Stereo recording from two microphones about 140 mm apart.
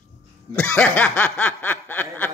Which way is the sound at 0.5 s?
10° left (ahead or behind).